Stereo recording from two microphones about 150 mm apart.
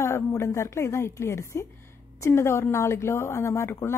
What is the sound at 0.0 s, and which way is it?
A woman's voice, 20° left (ahead or behind).